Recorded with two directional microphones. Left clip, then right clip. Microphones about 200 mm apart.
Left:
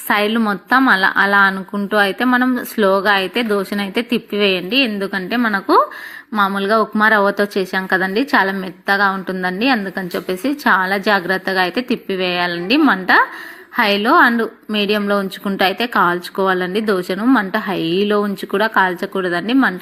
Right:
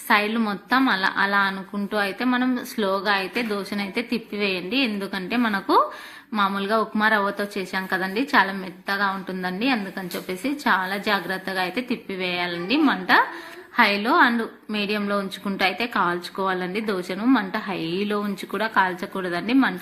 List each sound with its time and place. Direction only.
0.1 s a woman's voice: 30° left (ahead or behind)